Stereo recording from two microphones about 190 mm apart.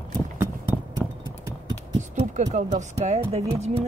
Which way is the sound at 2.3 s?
40° right (ahead or behind).